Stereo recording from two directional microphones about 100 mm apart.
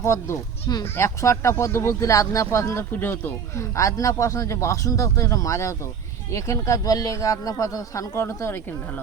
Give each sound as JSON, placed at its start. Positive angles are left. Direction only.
{"t": 0.0, "sound": "speech", "side_deg": 30}